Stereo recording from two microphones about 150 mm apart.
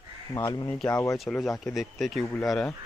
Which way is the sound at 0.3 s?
20° left (ahead or behind).